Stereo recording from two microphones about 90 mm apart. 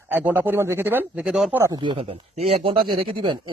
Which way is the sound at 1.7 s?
60° right (ahead or behind).